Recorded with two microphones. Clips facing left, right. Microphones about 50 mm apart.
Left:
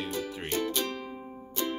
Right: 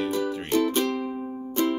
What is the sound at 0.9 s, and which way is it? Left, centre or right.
Music, right.